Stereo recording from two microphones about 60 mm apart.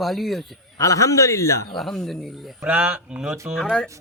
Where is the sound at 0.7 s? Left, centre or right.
Left.